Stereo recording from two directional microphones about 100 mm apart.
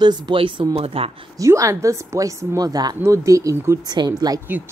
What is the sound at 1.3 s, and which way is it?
Speech, 35° right (ahead or behind).